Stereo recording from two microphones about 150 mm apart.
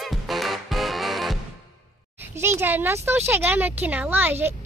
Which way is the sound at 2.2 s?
15° right (ahead or behind).